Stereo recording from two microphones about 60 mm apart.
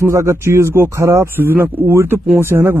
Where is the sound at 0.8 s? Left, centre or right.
Right.